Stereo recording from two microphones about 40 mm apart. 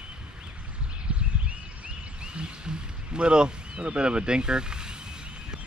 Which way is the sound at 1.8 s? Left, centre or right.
Right.